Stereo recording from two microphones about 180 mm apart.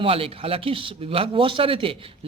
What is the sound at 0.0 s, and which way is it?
Speech, 30° right (ahead or behind).